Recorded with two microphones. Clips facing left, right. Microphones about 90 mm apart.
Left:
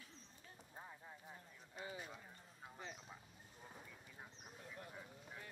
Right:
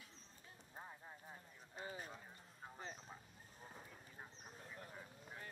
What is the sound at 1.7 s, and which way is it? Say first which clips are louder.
Clip-clop: even; 40° right (ahead or behind).